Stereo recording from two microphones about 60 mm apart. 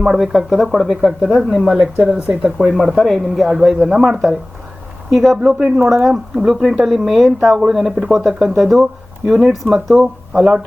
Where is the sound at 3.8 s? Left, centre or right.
Centre.